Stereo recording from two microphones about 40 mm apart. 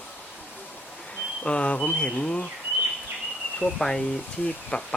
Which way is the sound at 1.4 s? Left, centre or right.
Left.